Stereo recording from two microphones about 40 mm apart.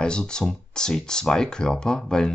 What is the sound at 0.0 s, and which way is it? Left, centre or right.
Speech, left.